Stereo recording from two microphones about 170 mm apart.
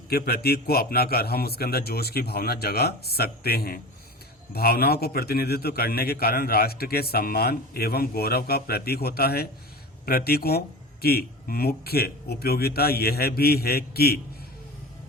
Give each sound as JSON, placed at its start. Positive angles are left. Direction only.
{"t": 0.1, "sound": "a man's voice", "side_deg": 60}